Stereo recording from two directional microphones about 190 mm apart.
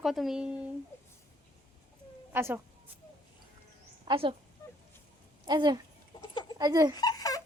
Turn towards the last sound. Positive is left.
turn(degrees=20)  # may be behind; listen again after turning